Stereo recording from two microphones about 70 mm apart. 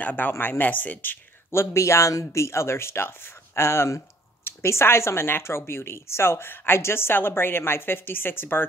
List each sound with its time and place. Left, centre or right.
0.0 s speech: left
1.6 s a woman's voice: left